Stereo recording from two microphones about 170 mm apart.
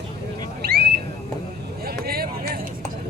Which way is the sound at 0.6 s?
70° right (ahead or behind).